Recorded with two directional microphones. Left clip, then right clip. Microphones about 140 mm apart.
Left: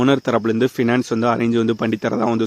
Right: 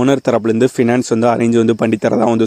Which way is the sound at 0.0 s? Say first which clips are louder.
Right 4 dB; 40° right (ahead or behind).